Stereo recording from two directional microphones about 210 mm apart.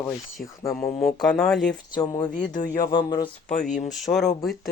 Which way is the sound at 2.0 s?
20° left (ahead or behind).